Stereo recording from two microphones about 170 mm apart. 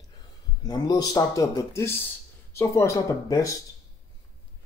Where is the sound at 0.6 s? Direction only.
20° left (ahead or behind).